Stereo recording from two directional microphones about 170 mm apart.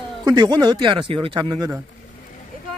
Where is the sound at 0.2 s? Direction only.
25° right (ahead or behind).